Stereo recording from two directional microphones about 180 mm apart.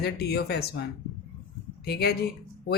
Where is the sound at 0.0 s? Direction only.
65° left (ahead or behind).